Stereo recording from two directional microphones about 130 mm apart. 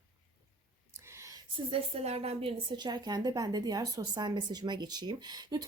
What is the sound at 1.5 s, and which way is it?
Speech, 50° right (ahead or behind).